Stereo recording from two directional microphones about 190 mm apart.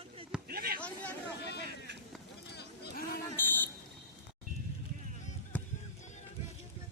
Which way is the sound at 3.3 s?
10° left (ahead or behind).